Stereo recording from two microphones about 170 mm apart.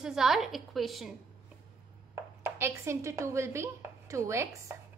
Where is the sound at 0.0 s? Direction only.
Centre (ahead or behind).